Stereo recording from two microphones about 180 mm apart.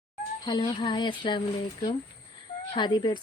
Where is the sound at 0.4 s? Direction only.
25° left (ahead or behind).